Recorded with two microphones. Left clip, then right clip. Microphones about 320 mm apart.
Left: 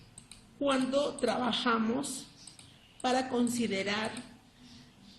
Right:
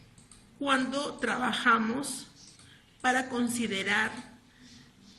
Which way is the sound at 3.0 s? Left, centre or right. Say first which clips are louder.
Right 2 dB; centre.